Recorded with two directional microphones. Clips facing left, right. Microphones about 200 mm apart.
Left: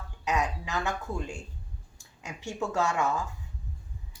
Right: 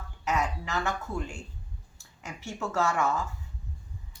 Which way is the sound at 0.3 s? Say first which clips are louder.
Even; 15° left (ahead or behind).